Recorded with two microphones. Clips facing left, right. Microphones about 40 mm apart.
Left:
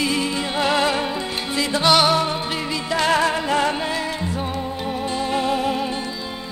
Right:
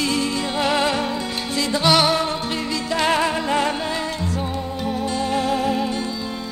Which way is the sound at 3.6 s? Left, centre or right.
Centre.